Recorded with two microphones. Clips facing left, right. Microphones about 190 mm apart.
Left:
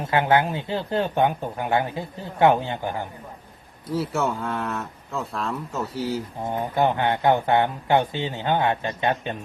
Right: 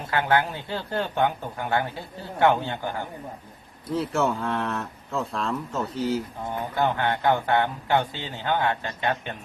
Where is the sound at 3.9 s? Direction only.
5° left (ahead or behind).